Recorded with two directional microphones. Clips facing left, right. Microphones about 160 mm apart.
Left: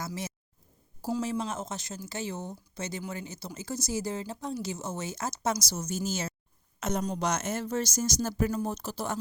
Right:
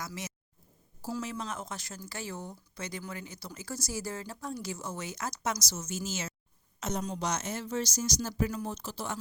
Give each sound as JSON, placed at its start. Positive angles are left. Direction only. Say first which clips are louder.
{"t": 0.0, "sound": "speech", "louder": "left 4 dB", "side_deg": 30}
{"t": 6.7, "sound": "speech", "louder": "left 4 dB", "side_deg": 55}